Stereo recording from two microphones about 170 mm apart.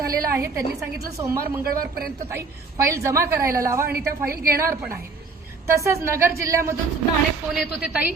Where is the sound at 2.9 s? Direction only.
15° right (ahead or behind).